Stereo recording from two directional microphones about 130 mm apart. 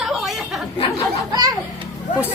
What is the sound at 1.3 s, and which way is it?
Speech, 30° right (ahead or behind).